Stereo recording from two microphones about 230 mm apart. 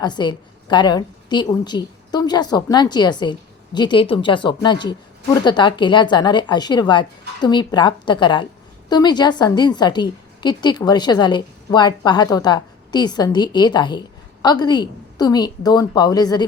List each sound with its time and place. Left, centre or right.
0.0 s a woman's voice: centre